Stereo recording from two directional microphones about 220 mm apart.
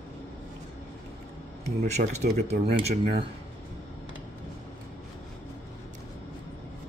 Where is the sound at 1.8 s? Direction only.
30° right (ahead or behind).